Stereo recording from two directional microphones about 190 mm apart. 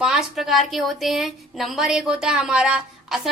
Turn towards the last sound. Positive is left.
turn(degrees=-5)  # may be behind; listen again after turning